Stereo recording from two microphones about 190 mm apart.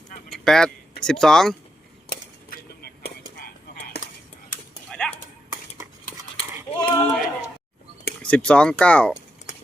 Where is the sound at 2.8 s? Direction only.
55° left (ahead or behind).